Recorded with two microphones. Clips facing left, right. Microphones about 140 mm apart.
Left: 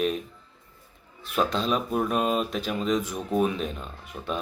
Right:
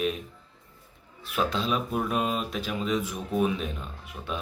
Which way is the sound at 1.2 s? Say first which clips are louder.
Left 2 dB; 5° right (ahead or behind).